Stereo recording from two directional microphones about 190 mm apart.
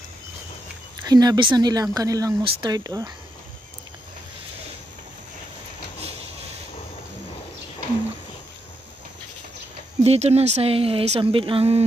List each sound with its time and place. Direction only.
1.0 s speech: 20° right (ahead or behind)
10.0 s speech: 35° right (ahead or behind)